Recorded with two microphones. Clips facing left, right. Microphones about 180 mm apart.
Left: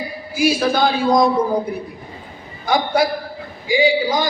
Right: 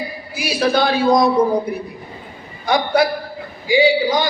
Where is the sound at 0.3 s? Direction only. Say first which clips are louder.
Left 1 dB; 50° left (ahead or behind).